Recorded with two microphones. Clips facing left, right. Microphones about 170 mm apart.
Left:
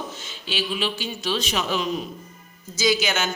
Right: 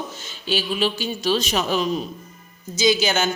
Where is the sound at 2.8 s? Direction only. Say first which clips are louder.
Right 3 dB; 25° right (ahead or behind).